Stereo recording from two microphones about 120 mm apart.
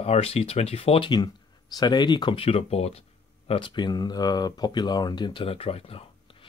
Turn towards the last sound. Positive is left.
turn(degrees=50)  # may be behind; listen again after turning